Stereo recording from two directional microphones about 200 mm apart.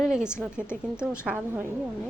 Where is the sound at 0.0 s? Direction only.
5° right (ahead or behind).